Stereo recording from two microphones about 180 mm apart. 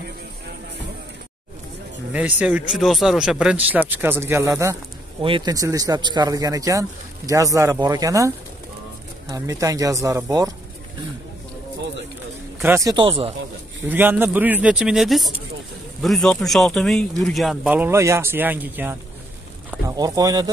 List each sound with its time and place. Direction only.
2.1 s speech: 10° right (ahead or behind)
9.3 s speech: 20° right (ahead or behind)
12.5 s speech: 10° right (ahead or behind)
12.9 s speech: 30° right (ahead or behind)
13.8 s speech: 10° right (ahead or behind)